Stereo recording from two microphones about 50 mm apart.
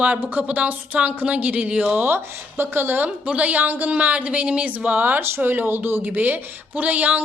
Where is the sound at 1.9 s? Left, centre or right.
Right.